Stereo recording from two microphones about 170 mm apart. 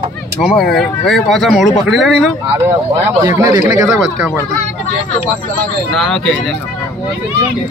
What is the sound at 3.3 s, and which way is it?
Speech, 20° right (ahead or behind).